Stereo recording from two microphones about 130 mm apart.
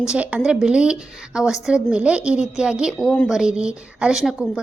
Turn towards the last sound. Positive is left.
turn(degrees=-5)  # may be behind; listen again after turning